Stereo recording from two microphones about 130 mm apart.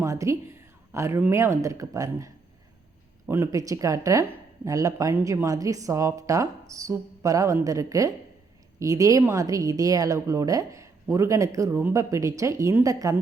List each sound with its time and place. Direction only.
0.0 s speech: 25° right (ahead or behind)